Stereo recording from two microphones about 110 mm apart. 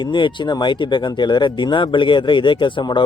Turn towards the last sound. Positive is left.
turn(degrees=45)  # may be behind; listen again after turning